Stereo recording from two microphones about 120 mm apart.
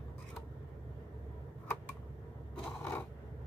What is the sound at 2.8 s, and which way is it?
Scissors, 15° left (ahead or behind).